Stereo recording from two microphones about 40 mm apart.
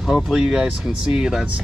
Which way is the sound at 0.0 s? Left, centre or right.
Centre.